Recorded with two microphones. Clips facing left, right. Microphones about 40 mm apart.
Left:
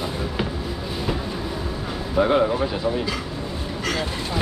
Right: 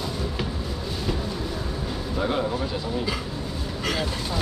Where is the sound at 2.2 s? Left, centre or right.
Left.